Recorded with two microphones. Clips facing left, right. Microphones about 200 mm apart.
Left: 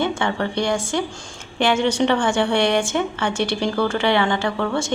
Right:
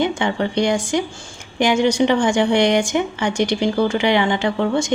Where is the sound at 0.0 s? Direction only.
15° right (ahead or behind).